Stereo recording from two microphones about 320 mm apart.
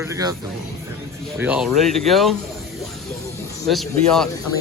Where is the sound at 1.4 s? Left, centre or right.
Centre.